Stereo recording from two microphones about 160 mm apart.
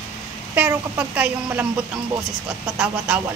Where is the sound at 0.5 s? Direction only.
10° right (ahead or behind).